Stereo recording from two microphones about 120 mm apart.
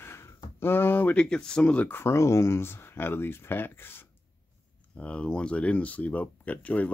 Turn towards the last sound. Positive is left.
turn(degrees=10)  # may be behind; listen again after turning